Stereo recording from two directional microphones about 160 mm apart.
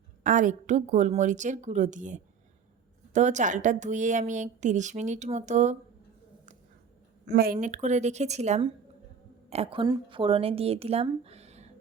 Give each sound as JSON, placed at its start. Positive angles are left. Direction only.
{"t": 0.2, "sound": "a woman's voice", "side_deg": -55}
{"t": 7.3, "sound": "a woman's voice", "side_deg": -75}